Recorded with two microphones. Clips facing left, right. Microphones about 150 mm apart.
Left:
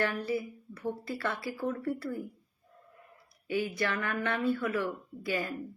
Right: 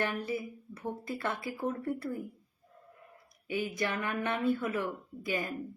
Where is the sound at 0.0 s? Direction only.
20° right (ahead or behind).